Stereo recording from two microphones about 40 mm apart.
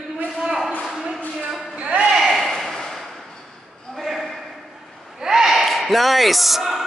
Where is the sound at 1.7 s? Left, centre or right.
Right.